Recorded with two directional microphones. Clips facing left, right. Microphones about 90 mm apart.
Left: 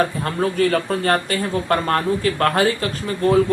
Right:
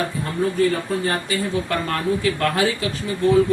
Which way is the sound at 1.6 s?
45° left (ahead or behind).